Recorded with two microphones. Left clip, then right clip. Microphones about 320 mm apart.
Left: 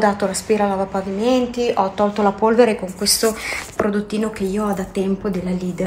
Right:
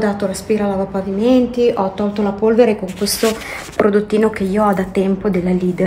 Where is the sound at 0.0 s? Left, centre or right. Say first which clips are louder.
Left 1 dB; centre.